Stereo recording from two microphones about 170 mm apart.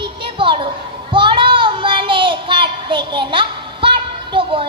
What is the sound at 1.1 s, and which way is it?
Child singing, 30° right (ahead or behind).